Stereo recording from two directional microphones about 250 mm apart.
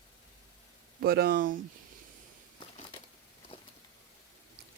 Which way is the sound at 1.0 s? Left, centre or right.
Right.